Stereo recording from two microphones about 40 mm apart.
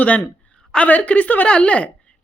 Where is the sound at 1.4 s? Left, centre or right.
Left.